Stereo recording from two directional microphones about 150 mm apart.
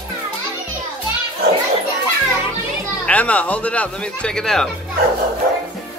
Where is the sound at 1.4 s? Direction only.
90° right.